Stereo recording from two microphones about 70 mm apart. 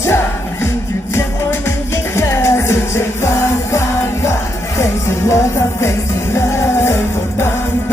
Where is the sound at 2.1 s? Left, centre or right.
Left.